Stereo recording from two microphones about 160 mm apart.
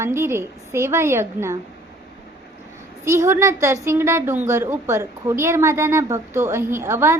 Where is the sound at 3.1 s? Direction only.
15° right (ahead or behind).